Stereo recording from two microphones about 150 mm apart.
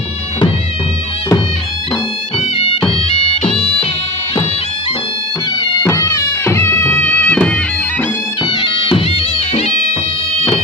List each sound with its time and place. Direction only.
2.6 s bagpipes: 40° left (ahead or behind)
5.8 s music: 20° left (ahead or behind)
8.4 s bagpipes: 35° left (ahead or behind)